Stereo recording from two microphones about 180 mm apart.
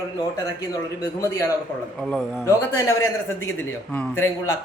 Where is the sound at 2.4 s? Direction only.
15° left (ahead or behind).